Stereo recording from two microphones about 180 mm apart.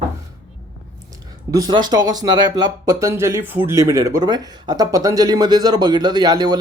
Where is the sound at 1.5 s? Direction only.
20° right (ahead or behind).